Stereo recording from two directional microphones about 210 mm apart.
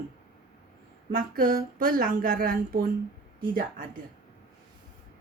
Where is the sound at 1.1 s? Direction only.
40° right (ahead or behind).